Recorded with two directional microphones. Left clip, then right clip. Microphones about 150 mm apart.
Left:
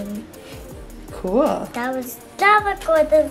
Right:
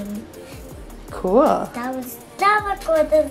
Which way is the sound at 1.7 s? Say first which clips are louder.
Left 3 dB; 5° left (ahead or behind).